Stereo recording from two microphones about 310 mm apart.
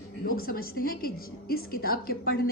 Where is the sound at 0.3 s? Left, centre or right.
Left.